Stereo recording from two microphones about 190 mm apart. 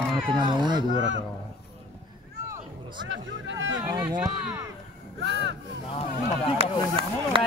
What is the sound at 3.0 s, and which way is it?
Vehicle, 75° right (ahead or behind).